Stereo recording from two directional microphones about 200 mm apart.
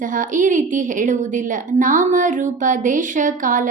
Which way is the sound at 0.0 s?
40° right (ahead or behind).